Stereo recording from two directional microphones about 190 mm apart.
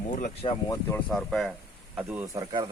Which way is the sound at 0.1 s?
40° left (ahead or behind).